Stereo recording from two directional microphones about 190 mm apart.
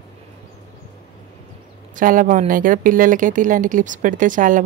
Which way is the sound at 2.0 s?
45° right (ahead or behind).